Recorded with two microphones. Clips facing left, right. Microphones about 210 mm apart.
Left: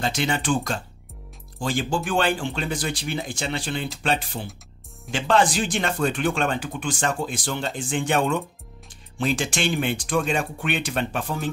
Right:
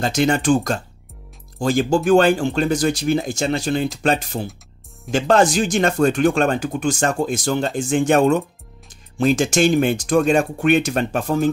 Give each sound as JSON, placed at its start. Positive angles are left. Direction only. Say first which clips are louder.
{"t": 0.0, "sound": "speech", "louder": "right 7 dB", "side_deg": -45}